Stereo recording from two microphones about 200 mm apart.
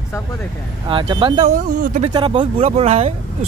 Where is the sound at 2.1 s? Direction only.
25° right (ahead or behind).